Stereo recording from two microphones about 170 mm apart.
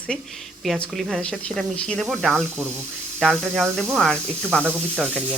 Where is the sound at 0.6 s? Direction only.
Centre (ahead or behind).